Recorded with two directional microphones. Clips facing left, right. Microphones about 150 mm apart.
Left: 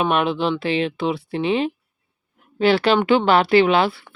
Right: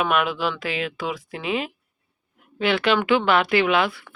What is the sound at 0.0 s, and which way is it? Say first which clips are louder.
Speech: left 3 dB; 30° left (ahead or behind).